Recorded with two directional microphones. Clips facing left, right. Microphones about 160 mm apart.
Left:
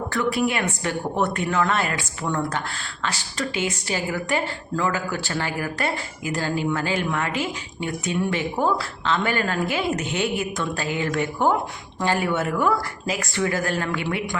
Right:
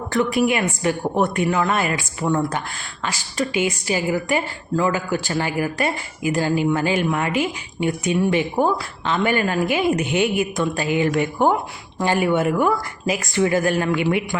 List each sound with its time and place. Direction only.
0.1 s a woman's voice: 15° right (ahead or behind)